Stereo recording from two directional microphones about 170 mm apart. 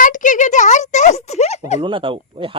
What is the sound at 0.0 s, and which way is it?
A child's voice, 50° left (ahead or behind).